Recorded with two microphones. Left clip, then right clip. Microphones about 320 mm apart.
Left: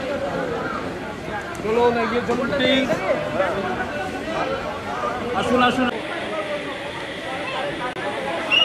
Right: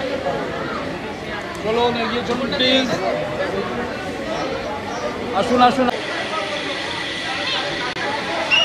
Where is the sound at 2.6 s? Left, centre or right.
Centre.